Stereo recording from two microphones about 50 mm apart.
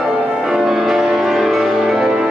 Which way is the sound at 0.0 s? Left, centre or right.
Centre.